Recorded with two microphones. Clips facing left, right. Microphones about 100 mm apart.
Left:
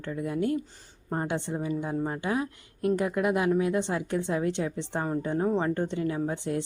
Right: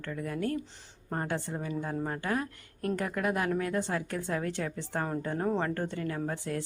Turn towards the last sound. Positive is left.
turn(degrees=20)  # may be behind; listen again after turning